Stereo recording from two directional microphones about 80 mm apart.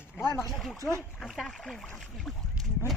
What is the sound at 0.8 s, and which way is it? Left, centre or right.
Speech, right.